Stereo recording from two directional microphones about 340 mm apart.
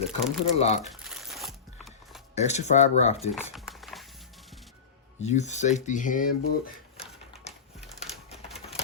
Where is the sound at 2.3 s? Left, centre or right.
Centre.